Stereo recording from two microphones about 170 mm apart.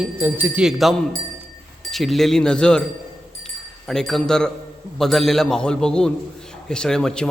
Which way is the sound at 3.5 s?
5° left (ahead or behind).